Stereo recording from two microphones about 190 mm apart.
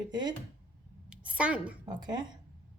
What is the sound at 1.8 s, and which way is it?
Speech, 20° right (ahead or behind).